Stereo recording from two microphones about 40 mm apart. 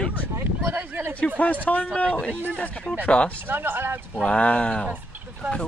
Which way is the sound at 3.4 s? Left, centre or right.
Right.